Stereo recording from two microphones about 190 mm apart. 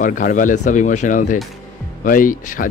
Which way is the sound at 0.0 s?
45° left (ahead or behind).